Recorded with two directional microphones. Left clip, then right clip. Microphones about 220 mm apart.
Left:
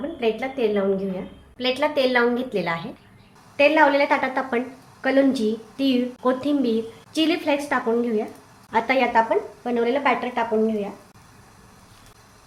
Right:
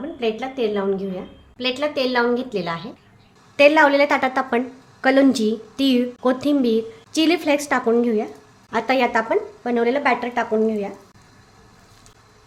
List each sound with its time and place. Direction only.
0.2 s a woman's voice: 10° right (ahead or behind)
3.6 s a woman's voice: 35° right (ahead or behind)